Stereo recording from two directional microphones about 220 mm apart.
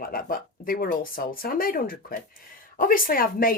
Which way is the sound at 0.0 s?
40° left (ahead or behind).